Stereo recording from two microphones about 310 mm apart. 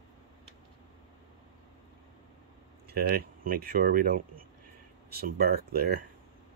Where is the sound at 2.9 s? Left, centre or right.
Right.